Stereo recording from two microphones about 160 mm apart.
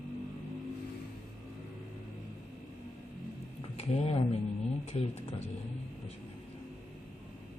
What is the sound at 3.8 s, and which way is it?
Speech, 40° left (ahead or behind).